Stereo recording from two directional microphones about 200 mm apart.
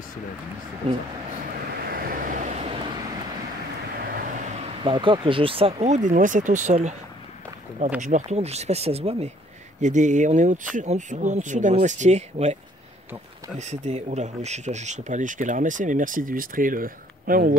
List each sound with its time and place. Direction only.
0.8 s speech: 30° right (ahead or behind)
1.8 s vehicle: 50° right (ahead or behind)
4.0 s vehicle: 45° right (ahead or behind)
4.8 s speech: 25° right (ahead or behind)
8.0 s speech: 35° right (ahead or behind)
13.6 s speech: 35° right (ahead or behind)